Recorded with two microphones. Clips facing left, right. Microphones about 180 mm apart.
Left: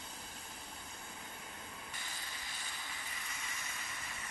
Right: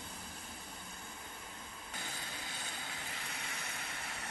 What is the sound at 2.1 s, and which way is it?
Vehicle, 60° right (ahead or behind).